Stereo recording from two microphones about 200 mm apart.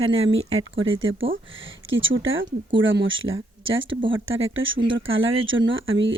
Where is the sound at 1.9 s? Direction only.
75° right (ahead or behind).